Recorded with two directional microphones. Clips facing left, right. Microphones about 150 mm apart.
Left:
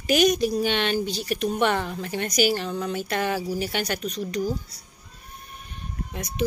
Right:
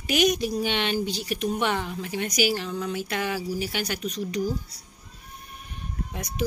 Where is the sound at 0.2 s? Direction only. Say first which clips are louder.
Even; 15° right (ahead or behind).